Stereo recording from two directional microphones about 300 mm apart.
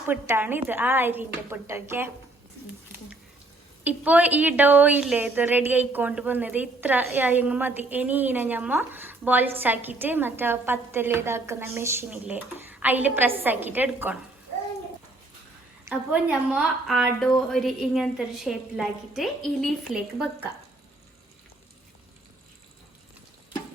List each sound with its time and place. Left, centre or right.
0.1 s a woman's voice: centre
3.8 s a woman's voice: centre
15.9 s a woman's voice: centre